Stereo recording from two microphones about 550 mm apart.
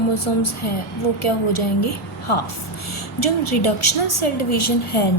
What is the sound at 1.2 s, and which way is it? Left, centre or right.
A woman's voice, left.